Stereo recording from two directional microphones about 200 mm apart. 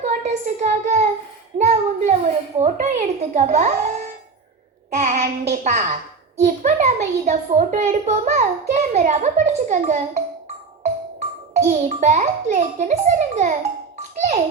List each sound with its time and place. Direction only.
0.0 s a sound: 35° right (ahead or behind)
4.9 s a child's voice: 35° right (ahead or behind)
11.5 s a child's voice: 35° right (ahead or behind)